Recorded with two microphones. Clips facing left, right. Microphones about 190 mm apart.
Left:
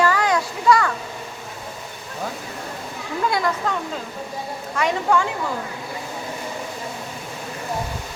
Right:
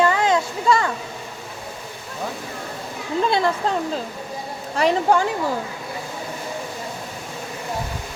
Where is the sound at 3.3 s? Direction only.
25° right (ahead or behind).